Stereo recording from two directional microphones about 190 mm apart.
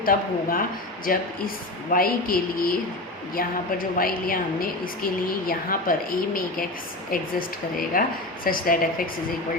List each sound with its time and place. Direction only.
0.0 s a woman's voice: 50° left (ahead or behind)